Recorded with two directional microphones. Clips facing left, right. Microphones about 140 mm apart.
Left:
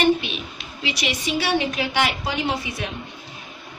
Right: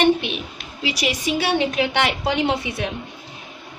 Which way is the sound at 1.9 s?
65° right (ahead or behind).